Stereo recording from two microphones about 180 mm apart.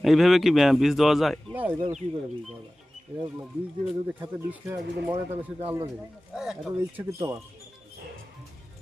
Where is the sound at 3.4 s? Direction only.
5° right (ahead or behind).